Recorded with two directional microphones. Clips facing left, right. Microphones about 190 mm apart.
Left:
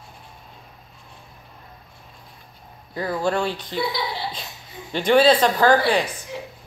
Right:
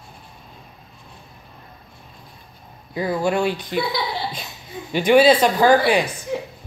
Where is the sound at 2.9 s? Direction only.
15° right (ahead or behind).